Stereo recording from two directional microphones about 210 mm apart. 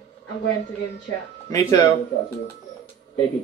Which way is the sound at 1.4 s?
20° left (ahead or behind).